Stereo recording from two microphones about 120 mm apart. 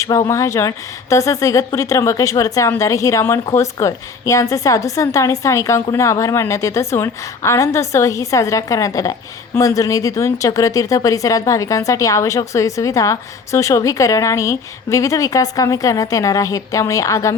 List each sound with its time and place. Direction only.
0.0 s speech: 25° left (ahead or behind)